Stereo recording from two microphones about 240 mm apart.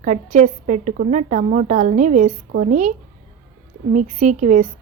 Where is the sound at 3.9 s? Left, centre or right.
Right.